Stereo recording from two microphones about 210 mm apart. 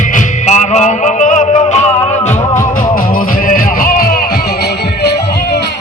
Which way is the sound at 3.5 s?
40° left (ahead or behind).